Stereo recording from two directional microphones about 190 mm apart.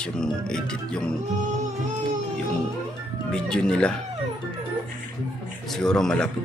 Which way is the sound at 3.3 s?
5° left (ahead or behind).